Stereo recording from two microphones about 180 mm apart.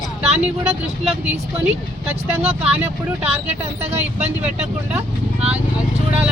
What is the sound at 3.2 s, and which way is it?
Speech, 35° right (ahead or behind).